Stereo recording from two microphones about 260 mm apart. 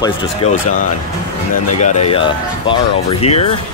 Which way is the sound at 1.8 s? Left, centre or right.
Left.